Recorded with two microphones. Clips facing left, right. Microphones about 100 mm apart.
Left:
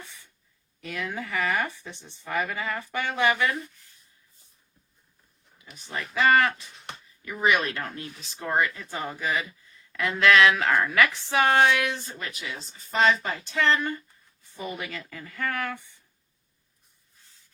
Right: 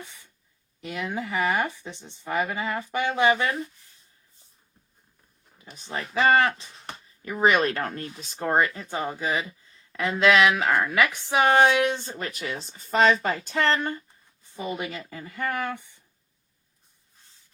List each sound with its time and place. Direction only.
0.0 s a sound: 15° right (ahead or behind)
0.8 s speech: 20° right (ahead or behind)
5.5 s speech: 30° right (ahead or behind)
6.8 s speech: 35° right (ahead or behind)
13.0 s speech: 50° right (ahead or behind)
13.3 s a woman's voice: 40° right (ahead or behind)
14.5 s speech: 25° right (ahead or behind)